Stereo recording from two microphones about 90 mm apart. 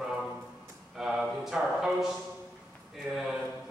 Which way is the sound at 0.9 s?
5° right (ahead or behind).